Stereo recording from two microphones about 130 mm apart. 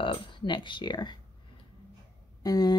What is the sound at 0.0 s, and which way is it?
Speech, 40° left (ahead or behind).